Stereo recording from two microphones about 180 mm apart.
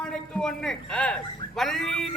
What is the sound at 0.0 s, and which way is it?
A man's voice, 5° left (ahead or behind).